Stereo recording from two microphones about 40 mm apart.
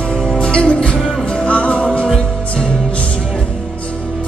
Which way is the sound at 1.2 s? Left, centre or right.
Left.